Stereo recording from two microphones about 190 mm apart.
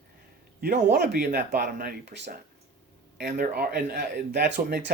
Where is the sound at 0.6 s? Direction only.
55° right (ahead or behind).